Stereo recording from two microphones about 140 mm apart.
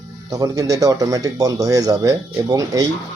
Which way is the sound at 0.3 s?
25° right (ahead or behind).